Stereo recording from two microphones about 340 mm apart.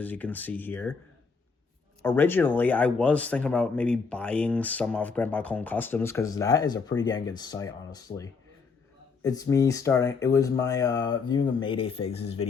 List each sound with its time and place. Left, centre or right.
0.0 s speech: centre
2.0 s speech: centre